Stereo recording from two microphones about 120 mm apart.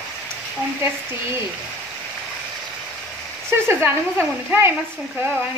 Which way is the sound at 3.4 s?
20° right (ahead or behind).